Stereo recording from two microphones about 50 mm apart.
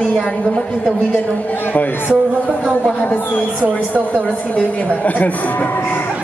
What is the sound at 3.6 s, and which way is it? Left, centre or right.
Speech, right.